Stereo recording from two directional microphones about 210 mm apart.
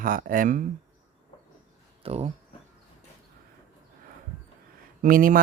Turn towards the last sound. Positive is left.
turn(degrees=-40)  # may be behind; listen again after turning